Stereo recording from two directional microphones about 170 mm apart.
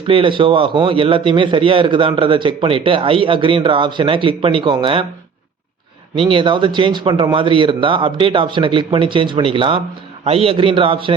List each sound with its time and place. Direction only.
0.1 s a man's voice: 30° right (ahead or behind)
6.1 s a man's voice: 30° right (ahead or behind)